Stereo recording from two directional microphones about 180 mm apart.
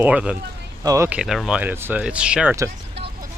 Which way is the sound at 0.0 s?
5° right (ahead or behind).